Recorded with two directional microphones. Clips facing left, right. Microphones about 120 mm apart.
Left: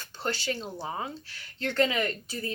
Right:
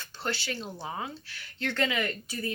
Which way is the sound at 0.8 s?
30° left (ahead or behind).